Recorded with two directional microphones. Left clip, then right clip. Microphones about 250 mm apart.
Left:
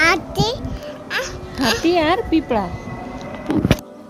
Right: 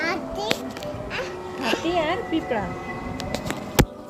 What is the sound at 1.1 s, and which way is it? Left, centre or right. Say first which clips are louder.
Music: left 9 dB; left.